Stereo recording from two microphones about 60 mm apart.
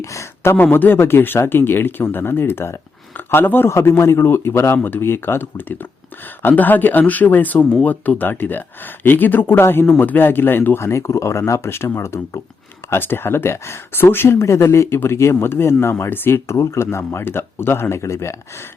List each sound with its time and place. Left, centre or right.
0.0 s speech: left
0.5 s speech: left
3.7 s speech: left
7.6 s speech: centre
7.9 s speech: left
10.8 s speech: left
12.9 s speech: left
14.3 s speech: left